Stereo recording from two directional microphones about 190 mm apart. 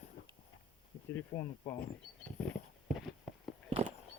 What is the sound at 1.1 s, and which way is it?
Speech, 15° left (ahead or behind).